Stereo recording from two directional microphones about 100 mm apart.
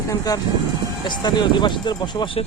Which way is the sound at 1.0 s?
50° left (ahead or behind).